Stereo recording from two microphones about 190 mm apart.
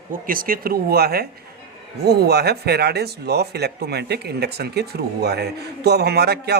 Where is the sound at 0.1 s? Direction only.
50° right (ahead or behind).